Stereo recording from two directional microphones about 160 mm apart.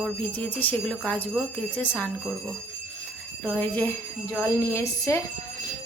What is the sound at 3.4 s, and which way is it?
Speech, 10° left (ahead or behind).